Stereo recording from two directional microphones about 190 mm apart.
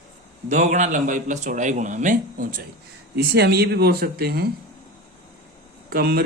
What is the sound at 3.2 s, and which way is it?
Speech, 60° right (ahead or behind).